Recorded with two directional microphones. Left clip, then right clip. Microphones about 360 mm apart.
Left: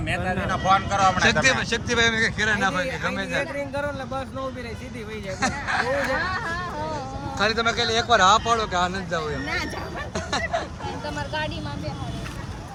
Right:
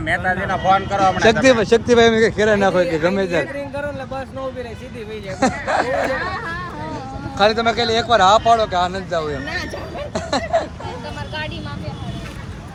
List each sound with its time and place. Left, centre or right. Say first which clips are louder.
0.0 s speech: right 7 dB; centre
0.5 s speech: right 3 dB; centre
5.4 s speech: right 6 dB; centre
6.1 s speech: right 2 dB; left
7.3 s speech: right 6 dB; centre
10.2 s a sound: right 7 dB; centre